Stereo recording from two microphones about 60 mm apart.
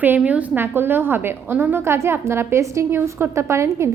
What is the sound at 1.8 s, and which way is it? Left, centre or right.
A woman's voice, right.